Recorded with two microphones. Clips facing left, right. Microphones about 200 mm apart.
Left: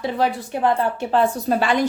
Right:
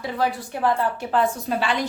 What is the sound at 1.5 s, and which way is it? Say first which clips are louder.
Speech: left 4 dB; 45° left (ahead or behind).